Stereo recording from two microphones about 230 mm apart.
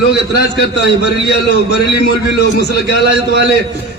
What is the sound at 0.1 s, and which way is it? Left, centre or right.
A man's voice, left.